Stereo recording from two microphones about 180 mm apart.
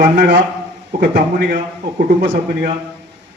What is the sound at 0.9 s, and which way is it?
Speech, 55° right (ahead or behind).